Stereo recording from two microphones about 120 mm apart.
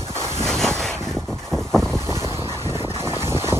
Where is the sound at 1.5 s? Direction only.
5° left (ahead or behind).